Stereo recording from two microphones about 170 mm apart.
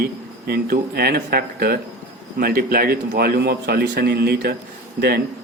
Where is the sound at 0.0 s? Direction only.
65° right (ahead or behind).